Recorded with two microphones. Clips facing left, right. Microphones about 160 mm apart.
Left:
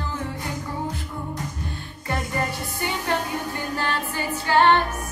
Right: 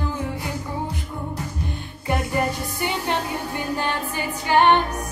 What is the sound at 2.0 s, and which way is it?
Music, 15° right (ahead or behind).